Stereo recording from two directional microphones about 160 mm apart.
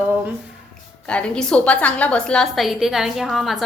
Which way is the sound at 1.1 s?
5° left (ahead or behind).